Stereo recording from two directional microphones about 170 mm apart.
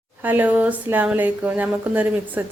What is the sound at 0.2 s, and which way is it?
Speech, 10° right (ahead or behind).